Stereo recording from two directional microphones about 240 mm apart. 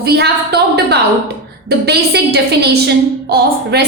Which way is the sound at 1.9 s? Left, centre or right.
Right.